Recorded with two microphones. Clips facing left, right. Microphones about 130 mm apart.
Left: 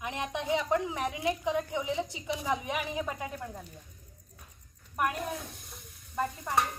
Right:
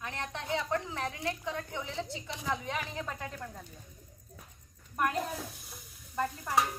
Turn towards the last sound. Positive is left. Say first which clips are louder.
# even
turn(degrees=0)  # may be behind; listen again after turning